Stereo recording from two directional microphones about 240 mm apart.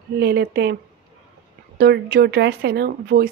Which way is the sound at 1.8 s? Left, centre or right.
Right.